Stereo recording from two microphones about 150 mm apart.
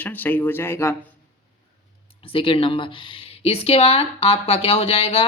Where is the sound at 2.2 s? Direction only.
35° left (ahead or behind).